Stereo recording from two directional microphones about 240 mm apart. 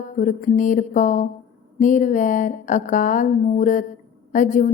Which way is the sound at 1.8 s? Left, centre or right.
Left.